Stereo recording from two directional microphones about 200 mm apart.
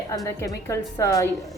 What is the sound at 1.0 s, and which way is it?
Speech, 15° left (ahead or behind).